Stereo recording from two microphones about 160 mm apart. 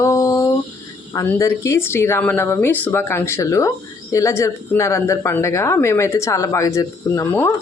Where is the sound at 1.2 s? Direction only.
20° left (ahead or behind).